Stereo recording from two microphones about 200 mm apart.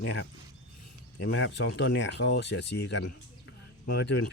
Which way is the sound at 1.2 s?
60° left (ahead or behind).